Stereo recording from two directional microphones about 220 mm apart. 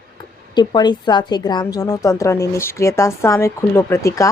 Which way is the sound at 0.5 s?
20° left (ahead or behind).